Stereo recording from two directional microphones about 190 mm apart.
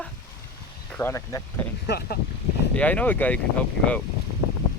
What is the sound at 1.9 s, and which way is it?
Speech, 55° left (ahead or behind).